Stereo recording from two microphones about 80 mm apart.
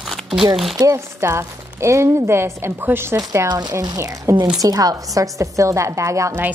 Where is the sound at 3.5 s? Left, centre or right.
Right.